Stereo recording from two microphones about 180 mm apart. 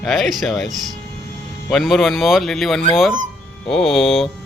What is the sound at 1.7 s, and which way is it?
Speech, centre (ahead or behind).